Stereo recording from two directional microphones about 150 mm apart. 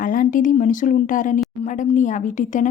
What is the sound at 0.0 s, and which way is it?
A woman's voice, 65° left (ahead or behind).